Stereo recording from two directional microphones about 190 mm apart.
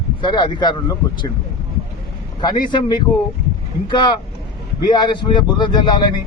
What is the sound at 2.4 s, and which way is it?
Speech, 20° left (ahead or behind).